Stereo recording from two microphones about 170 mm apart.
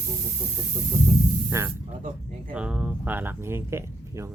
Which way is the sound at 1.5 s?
15° right (ahead or behind).